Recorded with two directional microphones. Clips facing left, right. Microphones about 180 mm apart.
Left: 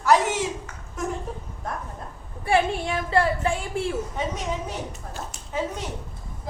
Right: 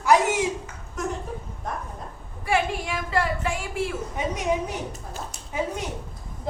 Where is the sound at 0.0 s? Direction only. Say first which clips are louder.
Right 1 dB; 10° right (ahead or behind).